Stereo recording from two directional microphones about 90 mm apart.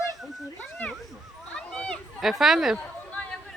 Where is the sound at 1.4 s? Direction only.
10° left (ahead or behind).